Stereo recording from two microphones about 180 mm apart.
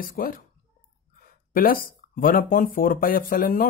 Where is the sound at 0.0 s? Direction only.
50° left (ahead or behind).